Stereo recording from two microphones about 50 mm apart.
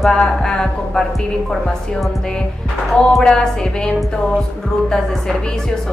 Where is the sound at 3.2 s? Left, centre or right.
Centre.